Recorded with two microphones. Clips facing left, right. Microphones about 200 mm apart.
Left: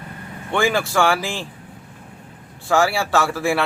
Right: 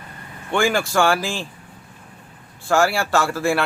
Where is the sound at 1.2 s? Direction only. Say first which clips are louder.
Right 1 dB; 15° left (ahead or behind).